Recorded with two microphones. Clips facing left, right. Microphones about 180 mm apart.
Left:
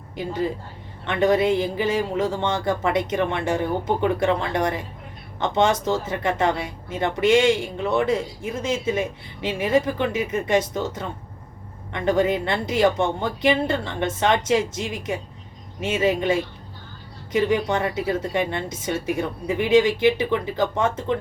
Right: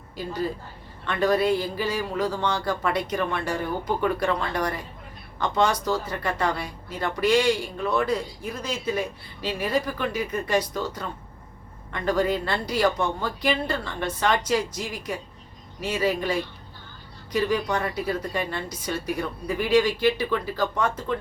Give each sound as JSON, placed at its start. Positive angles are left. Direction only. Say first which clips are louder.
{"t": 1.0, "sound": "speech", "louder": "left 3 dB", "side_deg": 20}